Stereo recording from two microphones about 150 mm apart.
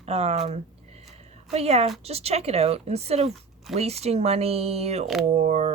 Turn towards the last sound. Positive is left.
turn(degrees=-50)  # may be behind; listen again after turning